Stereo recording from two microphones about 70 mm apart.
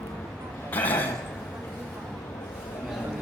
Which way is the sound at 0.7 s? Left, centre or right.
Left.